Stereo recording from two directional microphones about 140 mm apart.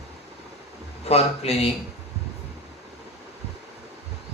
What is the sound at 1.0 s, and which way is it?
Speech, 45° left (ahead or behind).